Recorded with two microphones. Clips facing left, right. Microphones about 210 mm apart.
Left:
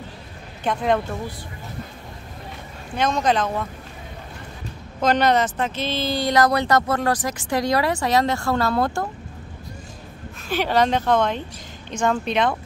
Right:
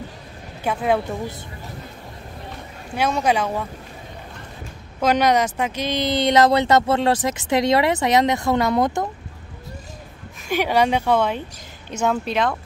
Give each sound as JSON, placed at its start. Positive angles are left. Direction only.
{"t": 0.7, "sound": "speech", "side_deg": -5}
{"t": 3.0, "sound": "speech", "side_deg": -10}
{"t": 5.0, "sound": "speech", "side_deg": -10}
{"t": 10.5, "sound": "speech", "side_deg": -10}